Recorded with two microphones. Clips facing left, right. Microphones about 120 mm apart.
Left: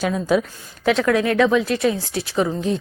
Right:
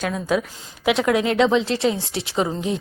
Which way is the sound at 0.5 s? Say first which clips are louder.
Left 1 dB; 15° right (ahead or behind).